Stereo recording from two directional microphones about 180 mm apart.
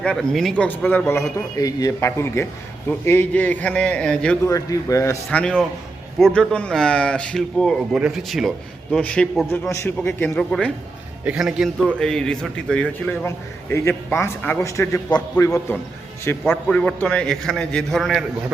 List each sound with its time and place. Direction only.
0.0 s a man's voice: 5° left (ahead or behind)
4.4 s a man's voice: 20° left (ahead or behind)
5.4 s speech: 5° left (ahead or behind)
9.6 s a man's voice: 15° left (ahead or behind)
16.4 s speech: 5° left (ahead or behind)